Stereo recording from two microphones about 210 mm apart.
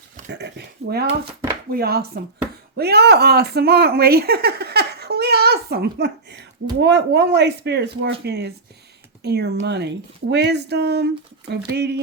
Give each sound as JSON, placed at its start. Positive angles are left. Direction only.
{"t": 0.3, "sound": "speech", "side_deg": -55}